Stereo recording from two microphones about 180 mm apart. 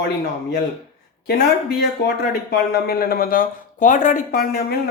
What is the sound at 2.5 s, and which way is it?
Speech, 55° left (ahead or behind).